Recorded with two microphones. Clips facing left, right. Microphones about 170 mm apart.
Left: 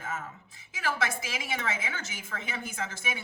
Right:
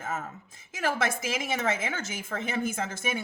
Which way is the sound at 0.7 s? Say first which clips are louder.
Right 3 dB; 45° right (ahead or behind).